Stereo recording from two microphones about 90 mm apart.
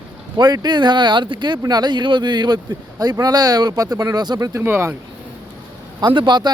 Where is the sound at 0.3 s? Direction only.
50° right (ahead or behind).